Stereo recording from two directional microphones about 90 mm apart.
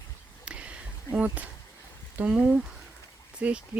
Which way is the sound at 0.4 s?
15° right (ahead or behind).